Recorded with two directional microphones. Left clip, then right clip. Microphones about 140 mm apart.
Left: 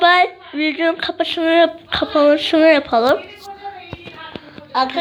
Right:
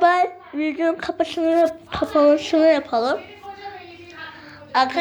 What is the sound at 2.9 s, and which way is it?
Speech, 30° left (ahead or behind).